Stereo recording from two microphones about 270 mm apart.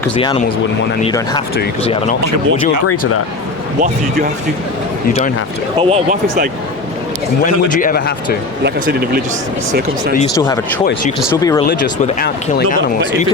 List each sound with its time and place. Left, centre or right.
1.0 s speech: centre
2.8 s speech: left
5.8 s speech: right
7.4 s speech: left
8.6 s speech: right
10.3 s speech: centre